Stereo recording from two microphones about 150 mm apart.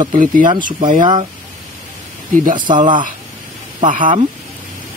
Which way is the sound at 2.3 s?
60° right (ahead or behind).